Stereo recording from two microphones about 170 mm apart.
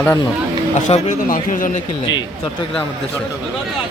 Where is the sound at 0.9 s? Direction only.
45° left (ahead or behind).